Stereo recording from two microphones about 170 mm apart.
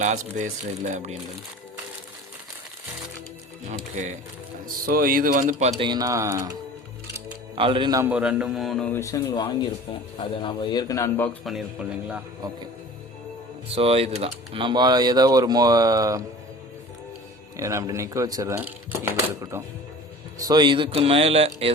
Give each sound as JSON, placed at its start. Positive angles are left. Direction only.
{"t": 0.0, "sound": "speech", "side_deg": -45}
{"t": 4.9, "sound": "speech", "side_deg": -60}
{"t": 5.8, "sound": "speech", "side_deg": -25}
{"t": 7.5, "sound": "speech", "side_deg": -30}
{"t": 8.0, "sound": "speech", "side_deg": -5}
{"t": 8.9, "sound": "a man's voice", "side_deg": 15}
{"t": 11.4, "sound": "speech", "side_deg": -5}
{"t": 13.7, "sound": "speech", "side_deg": -35}
{"t": 17.6, "sound": "speech", "side_deg": -20}
{"t": 20.5, "sound": "speech", "side_deg": -25}